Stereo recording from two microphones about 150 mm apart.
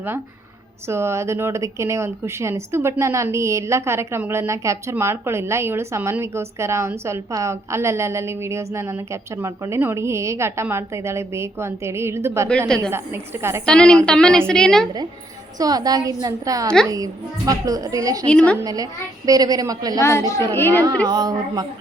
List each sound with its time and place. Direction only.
0.9 s speech: 15° right (ahead or behind)
12.6 s a woman's voice: 5° left (ahead or behind)
15.5 s a woman's voice: 25° right (ahead or behind)
20.0 s a woman's voice: 20° left (ahead or behind)
21.1 s a woman's voice: 25° right (ahead or behind)